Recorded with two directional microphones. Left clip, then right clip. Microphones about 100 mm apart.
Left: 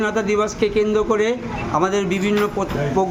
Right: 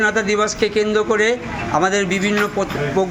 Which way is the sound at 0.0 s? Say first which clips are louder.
Right 3 dB; 25° left (ahead or behind).